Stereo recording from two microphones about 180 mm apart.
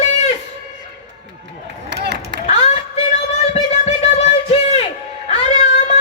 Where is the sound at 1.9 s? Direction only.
70° right (ahead or behind).